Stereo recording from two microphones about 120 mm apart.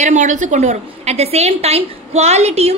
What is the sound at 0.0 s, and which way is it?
A woman's voice, 85° right.